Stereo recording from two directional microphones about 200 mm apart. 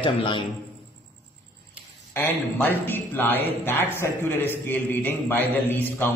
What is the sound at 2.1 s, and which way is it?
A man's voice, 10° left (ahead or behind).